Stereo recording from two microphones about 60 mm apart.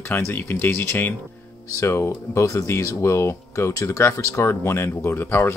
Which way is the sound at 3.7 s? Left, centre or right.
Left.